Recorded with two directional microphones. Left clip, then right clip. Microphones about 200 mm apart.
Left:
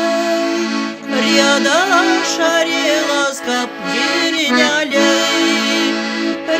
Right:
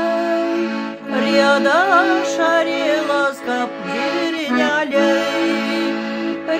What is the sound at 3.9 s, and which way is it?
Music, 40° left (ahead or behind).